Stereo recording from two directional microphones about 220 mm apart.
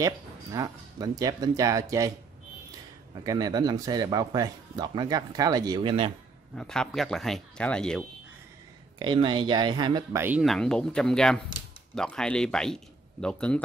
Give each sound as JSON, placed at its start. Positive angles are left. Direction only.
{"t": 0.0, "sound": "a man's voice", "side_deg": -15}
{"t": 3.3, "sound": "a man's voice", "side_deg": -15}
{"t": 6.5, "sound": "speech", "side_deg": 5}
{"t": 9.0, "sound": "speech", "side_deg": -20}
{"t": 10.2, "sound": "speech", "side_deg": -5}